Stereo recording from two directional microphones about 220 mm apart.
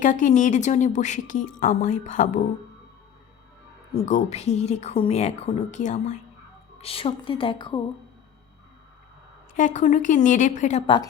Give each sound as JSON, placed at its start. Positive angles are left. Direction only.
{"t": 0.0, "sound": "a woman's voice", "side_deg": 35}
{"t": 3.9, "sound": "a woman's voice", "side_deg": 30}
{"t": 9.6, "sound": "a woman's voice", "side_deg": 35}